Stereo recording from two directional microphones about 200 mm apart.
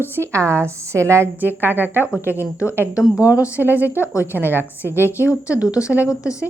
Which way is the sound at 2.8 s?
5° right (ahead or behind).